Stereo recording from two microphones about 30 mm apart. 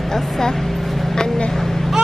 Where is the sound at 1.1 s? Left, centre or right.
Left.